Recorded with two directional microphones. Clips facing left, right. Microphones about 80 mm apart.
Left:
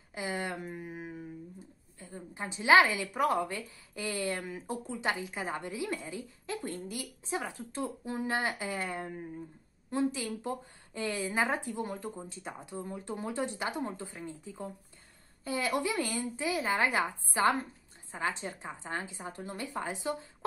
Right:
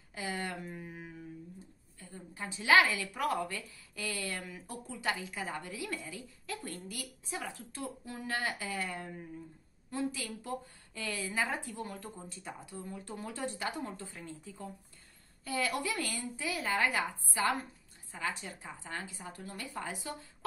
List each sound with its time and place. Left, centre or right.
0.1 s a sound: left
0.7 s mantra: centre
2.0 s a woman's voice: left